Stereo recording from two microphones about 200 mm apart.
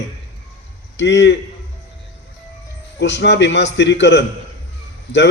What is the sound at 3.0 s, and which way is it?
Speech, 60° left (ahead or behind).